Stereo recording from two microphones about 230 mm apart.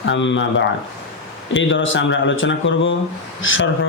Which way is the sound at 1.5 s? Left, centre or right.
Left.